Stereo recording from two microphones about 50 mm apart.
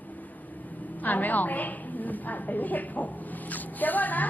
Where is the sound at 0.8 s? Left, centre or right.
Left.